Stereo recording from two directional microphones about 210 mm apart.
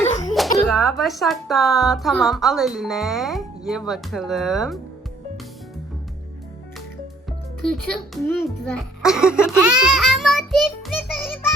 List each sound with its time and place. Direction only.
0.0 s sneeze: 35° left (ahead or behind)
0.3 s speech: centre (ahead or behind)
7.7 s a child's voice: centre (ahead or behind)